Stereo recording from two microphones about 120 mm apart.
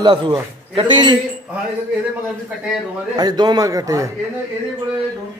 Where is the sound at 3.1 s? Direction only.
35° right (ahead or behind).